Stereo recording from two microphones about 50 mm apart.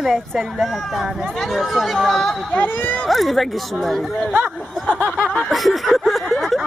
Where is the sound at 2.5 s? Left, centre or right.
Left.